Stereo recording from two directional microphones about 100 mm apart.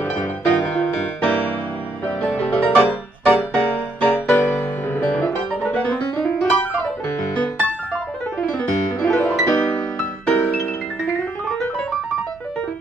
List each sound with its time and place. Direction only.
0.8 s music: 15° left (ahead or behind)
5.1 s piano: 10° left (ahead or behind)
8.4 s music: 10° left (ahead or behind)
9.5 s music: 20° left (ahead or behind)